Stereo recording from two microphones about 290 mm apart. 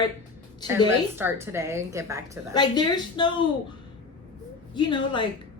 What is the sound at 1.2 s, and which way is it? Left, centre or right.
A woman's voice, centre.